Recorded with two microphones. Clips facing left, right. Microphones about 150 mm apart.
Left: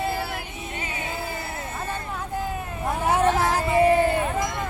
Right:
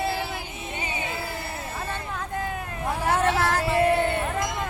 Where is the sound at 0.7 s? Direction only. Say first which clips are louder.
Right 2 dB; 20° right (ahead or behind).